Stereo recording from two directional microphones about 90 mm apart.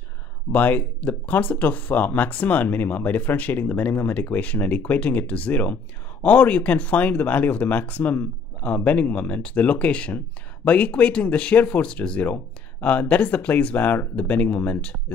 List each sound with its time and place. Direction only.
0.5 s speech: 20° left (ahead or behind)